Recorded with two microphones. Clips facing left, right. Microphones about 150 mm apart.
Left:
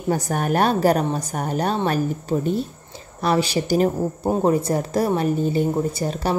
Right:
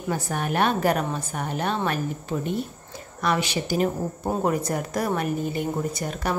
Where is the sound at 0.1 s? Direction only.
45° left (ahead or behind).